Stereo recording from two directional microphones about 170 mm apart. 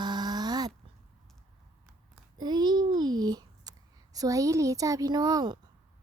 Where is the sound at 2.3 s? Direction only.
25° right (ahead or behind).